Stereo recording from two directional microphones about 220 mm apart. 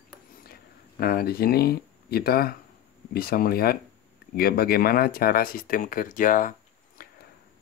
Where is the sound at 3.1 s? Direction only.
45° left (ahead or behind).